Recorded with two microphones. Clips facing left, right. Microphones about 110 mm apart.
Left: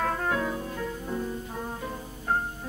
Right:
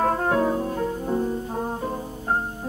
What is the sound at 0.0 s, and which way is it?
Music, 35° right (ahead or behind).